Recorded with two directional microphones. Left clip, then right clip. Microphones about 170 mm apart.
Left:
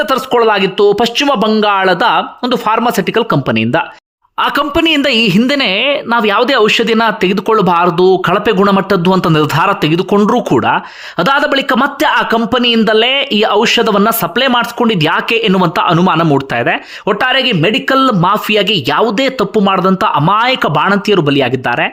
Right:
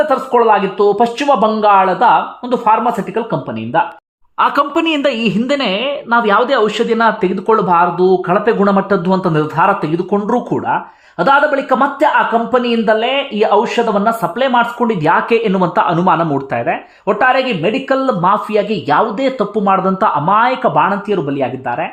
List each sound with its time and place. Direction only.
0.1 s speech: 35° left (ahead or behind)
3.2 s speech: 35° left (ahead or behind)
4.4 s speech: 25° left (ahead or behind)